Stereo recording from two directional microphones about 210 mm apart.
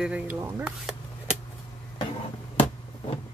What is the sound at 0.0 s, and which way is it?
Speech, 5° right (ahead or behind).